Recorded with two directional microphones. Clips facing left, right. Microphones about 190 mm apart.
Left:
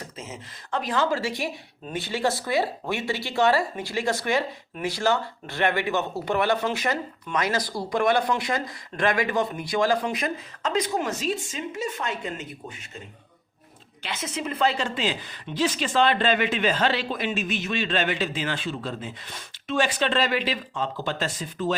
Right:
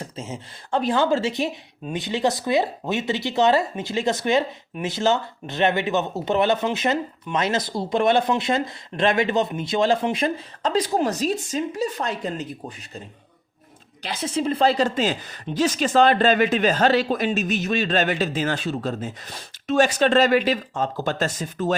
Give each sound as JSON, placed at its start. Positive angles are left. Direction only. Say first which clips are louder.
{"t": 0.0, "sound": "speech", "louder": "right 5 dB", "side_deg": -30}
{"t": 14.0, "sound": "speech", "louder": "right 6 dB", "side_deg": -35}